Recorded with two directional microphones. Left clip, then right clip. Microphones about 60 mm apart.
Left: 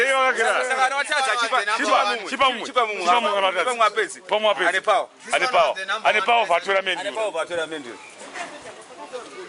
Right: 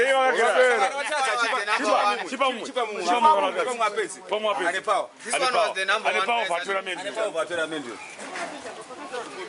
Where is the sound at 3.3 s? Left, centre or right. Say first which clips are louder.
Left 3 dB; left.